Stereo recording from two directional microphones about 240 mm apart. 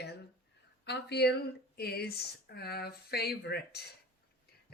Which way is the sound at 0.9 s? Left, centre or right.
Left.